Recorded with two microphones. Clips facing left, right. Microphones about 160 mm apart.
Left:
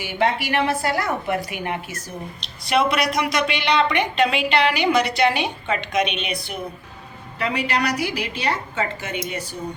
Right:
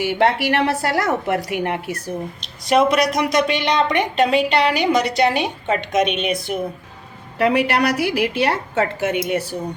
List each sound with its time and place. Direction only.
0.0 s a woman's voice: 70° right (ahead or behind)
2.4 s a woman's voice: 45° right (ahead or behind)
7.3 s a woman's voice: 65° right (ahead or behind)
8.1 s a woman's voice: 10° right (ahead or behind)
8.4 s a woman's voice: 70° right (ahead or behind)